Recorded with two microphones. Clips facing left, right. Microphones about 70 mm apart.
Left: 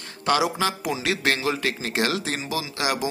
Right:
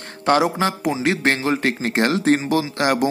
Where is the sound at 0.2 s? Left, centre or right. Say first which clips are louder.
Right 5 dB; right.